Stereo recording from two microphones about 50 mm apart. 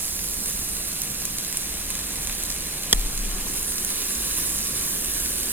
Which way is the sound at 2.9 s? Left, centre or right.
Right.